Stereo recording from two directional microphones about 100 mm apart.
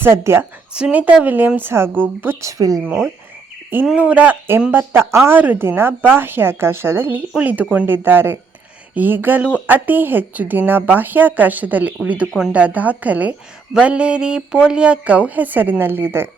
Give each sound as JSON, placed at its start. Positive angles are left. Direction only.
{"t": 0.0, "sound": "speech", "side_deg": -25}
{"t": 0.7, "sound": "a woman's voice", "side_deg": -15}
{"t": 2.4, "sound": "speech", "side_deg": -35}
{"t": 2.8, "sound": "a woman's voice", "side_deg": -20}